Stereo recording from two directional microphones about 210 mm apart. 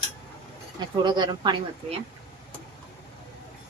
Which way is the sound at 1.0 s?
20° right (ahead or behind).